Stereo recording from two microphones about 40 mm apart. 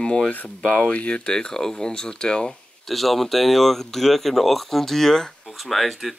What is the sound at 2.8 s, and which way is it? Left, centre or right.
Speech, centre.